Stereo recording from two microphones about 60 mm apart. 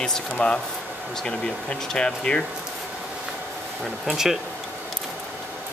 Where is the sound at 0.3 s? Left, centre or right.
Centre.